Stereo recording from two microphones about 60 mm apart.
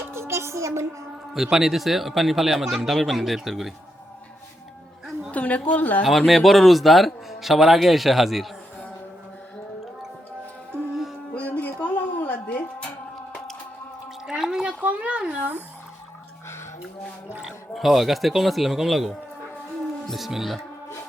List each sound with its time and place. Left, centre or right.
0.1 s music: right
1.3 s speech: centre
5.3 s a woman's voice: left
6.1 s speech: centre
11.3 s music: left
14.3 s a sound: centre
14.8 s a sound: right
17.4 s speech: centre